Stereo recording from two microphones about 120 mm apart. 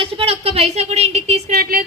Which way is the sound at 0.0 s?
50° right (ahead or behind).